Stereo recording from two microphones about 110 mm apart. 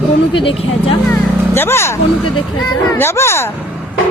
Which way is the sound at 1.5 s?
25° left (ahead or behind).